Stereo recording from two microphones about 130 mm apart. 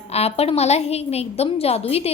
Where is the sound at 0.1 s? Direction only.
50° left (ahead or behind).